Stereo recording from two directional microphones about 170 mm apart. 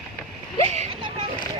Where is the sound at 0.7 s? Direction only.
40° right (ahead or behind).